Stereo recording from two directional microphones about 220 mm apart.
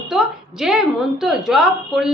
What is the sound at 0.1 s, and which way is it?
A woman's voice, centre (ahead or behind).